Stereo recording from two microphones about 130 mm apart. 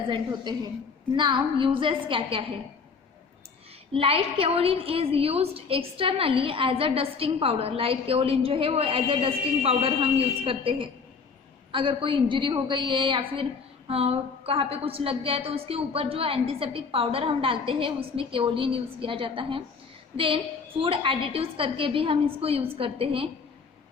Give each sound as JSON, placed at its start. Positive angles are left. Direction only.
{"t": 0.1, "sound": "a woman's voice", "side_deg": -35}
{"t": 3.9, "sound": "a woman's voice", "side_deg": -45}